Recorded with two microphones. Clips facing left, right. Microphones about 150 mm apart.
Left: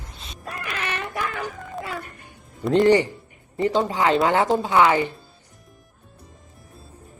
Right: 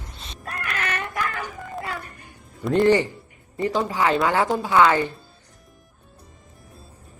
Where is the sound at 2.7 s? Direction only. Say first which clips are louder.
Left 1 dB; 20° left (ahead or behind).